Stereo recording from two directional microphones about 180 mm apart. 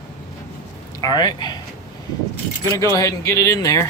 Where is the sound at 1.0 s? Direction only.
20° left (ahead or behind).